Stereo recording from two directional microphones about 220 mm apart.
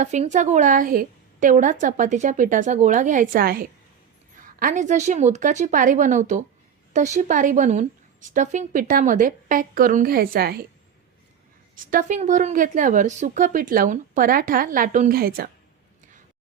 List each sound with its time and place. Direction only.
0.0 s a woman's voice: 35° right (ahead or behind)
11.7 s a woman's voice: 40° right (ahead or behind)